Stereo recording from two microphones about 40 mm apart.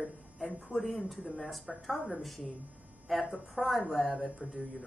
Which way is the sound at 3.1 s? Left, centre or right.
Centre.